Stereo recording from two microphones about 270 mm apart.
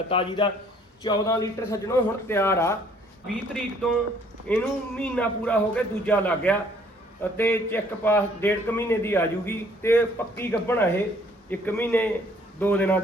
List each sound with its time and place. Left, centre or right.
0.1 s a man's voice: centre
4.4 s a man's voice: centre